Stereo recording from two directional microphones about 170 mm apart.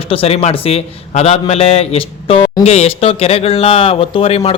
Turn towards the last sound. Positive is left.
turn(degrees=35)  # may be behind; listen again after turning